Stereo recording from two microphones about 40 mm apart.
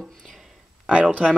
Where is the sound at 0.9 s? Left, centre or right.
Right.